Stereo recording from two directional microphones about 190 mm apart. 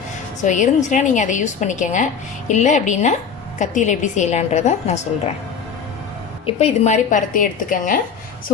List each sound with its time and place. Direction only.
0.4 s a woman's voice: 40° left (ahead or behind)
6.4 s a woman's voice: 35° left (ahead or behind)